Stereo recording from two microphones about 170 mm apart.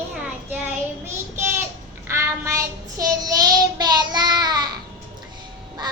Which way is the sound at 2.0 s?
15° right (ahead or behind).